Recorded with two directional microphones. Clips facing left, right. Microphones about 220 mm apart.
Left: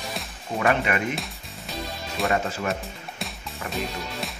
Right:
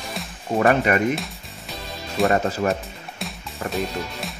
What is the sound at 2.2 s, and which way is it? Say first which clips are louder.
Speech: right 5 dB; 40° right (ahead or behind).